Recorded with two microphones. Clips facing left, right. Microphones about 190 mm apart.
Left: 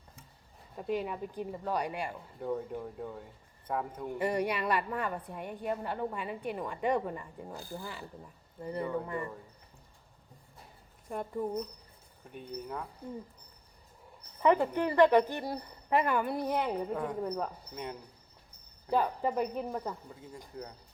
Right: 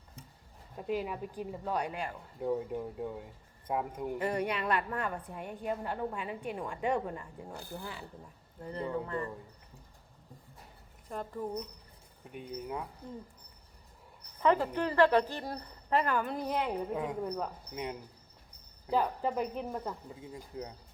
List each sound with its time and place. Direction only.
0.8 s a woman's voice: centre (ahead or behind)
2.4 s a woman's voice: 5° right (ahead or behind)
4.2 s a woman's voice: 5° left (ahead or behind)
7.5 s speech: 60° right (ahead or behind)
8.6 s a woman's voice: 5° left (ahead or behind)
11.1 s a woman's voice: 10° left (ahead or behind)
12.3 s speech: 15° right (ahead or behind)
14.4 s a woman's voice: 15° left (ahead or behind)
16.6 s a woman's voice: 5° right (ahead or behind)
18.9 s a woman's voice: centre (ahead or behind)